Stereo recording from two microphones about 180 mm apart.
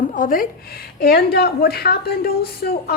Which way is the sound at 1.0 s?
60° left (ahead or behind).